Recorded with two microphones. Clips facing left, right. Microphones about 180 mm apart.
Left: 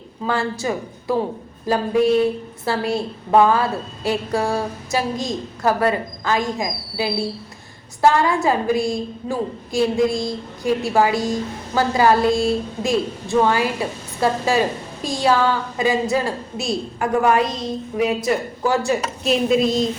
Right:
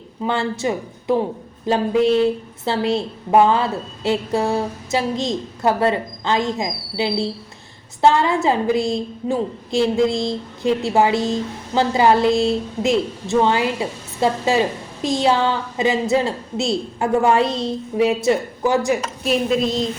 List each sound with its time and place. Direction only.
0.2 s a woman's voice: 25° right (ahead or behind)
19.2 s speech: centre (ahead or behind)